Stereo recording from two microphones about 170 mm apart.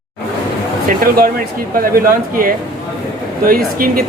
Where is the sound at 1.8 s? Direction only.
55° right (ahead or behind).